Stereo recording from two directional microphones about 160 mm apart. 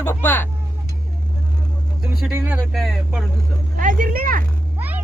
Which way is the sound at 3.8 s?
55° right (ahead or behind).